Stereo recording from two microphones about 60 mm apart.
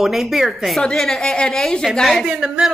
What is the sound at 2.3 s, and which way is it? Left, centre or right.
Speech, centre.